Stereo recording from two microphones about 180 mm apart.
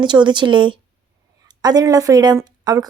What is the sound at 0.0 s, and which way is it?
Speech, 25° right (ahead or behind).